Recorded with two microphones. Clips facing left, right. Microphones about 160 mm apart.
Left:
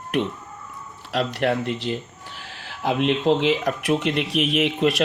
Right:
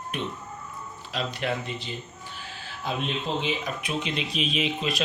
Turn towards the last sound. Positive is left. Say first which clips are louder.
# left 7 dB
turn(degrees=75)  # may be behind; listen again after turning